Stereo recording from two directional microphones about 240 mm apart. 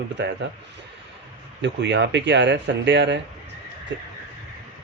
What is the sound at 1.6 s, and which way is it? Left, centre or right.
Speech, right.